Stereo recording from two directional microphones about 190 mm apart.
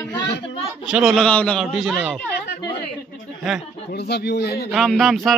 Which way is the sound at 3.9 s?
60° left (ahead or behind).